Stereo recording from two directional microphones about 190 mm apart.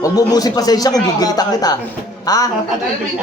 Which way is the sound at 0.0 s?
20° left (ahead or behind).